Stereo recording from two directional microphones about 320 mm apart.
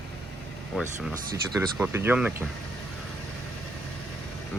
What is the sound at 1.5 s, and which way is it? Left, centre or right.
Speech, centre.